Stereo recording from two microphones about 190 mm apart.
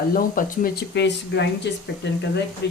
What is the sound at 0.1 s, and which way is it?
Speech, 50° left (ahead or behind).